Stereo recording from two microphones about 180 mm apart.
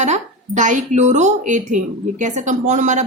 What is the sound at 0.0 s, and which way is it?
Speech, 40° right (ahead or behind).